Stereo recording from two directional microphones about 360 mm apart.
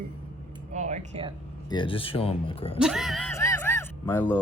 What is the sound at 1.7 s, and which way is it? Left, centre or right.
Speech, centre.